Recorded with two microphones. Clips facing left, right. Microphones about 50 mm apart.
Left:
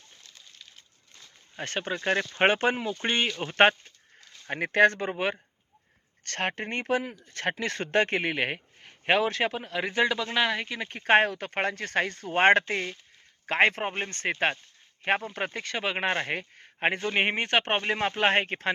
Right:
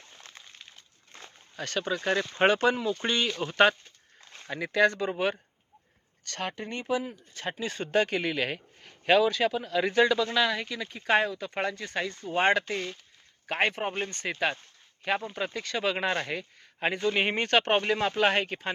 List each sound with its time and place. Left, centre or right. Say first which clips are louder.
0.2 s a sound: right 7 dB; right
1.5 s speech: right 1 dB; left
4.4 s speech: left 3 dB; left
8.2 s speech: left 1 dB; left
9.2 s speech: right 2 dB; left
10.8 s speech: left 4 dB; left
13.5 s speech: left 4 dB; left
13.9 s speech: left 2 dB; left
16.4 s a sound: left 3 dB; left
17.1 s speech: right 3 dB; left